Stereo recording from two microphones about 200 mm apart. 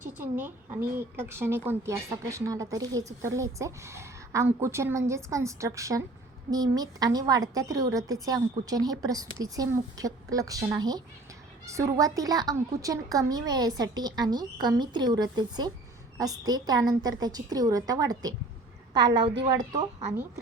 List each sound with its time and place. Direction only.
0.0 s a woman's voice: 10° right (ahead or behind)